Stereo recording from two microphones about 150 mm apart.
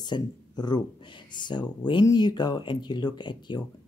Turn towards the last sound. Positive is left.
turn(degrees=30)  # may be behind; listen again after turning